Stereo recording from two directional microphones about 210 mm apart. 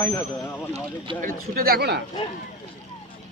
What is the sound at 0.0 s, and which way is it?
Speech, 10° left (ahead or behind).